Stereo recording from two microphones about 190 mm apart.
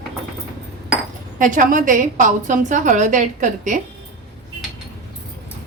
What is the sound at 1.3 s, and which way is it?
A woman's voice, 45° right (ahead or behind).